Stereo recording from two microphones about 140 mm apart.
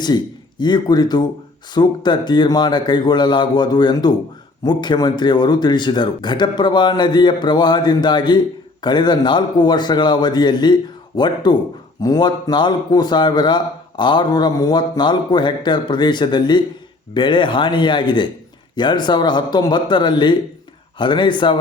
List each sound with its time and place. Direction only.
0.6 s a man's voice: 30° left (ahead or behind)